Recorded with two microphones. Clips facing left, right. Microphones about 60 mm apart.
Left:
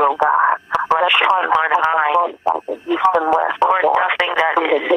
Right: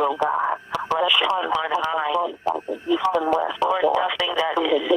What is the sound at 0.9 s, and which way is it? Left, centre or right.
Radio, left.